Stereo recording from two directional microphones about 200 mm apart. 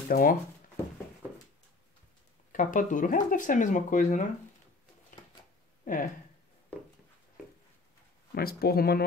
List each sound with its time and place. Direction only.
0.1 s speech: 45° left (ahead or behind)
2.5 s speech: 40° left (ahead or behind)
5.9 s speech: 45° left (ahead or behind)
8.4 s speech: 50° left (ahead or behind)